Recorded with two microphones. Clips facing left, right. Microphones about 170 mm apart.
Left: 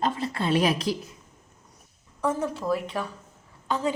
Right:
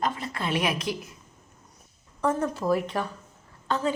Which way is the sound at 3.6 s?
15° left (ahead or behind).